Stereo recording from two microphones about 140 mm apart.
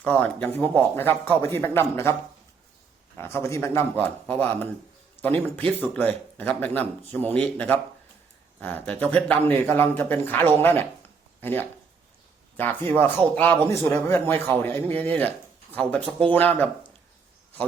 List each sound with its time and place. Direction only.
0.0 s speech: 10° left (ahead or behind)
3.2 s speech: 15° left (ahead or behind)